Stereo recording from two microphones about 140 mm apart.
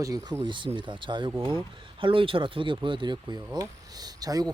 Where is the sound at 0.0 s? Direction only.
25° right (ahead or behind).